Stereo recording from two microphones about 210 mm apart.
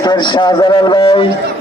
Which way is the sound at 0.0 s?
20° left (ahead or behind).